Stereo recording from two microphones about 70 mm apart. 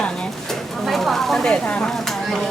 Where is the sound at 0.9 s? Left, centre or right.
Centre.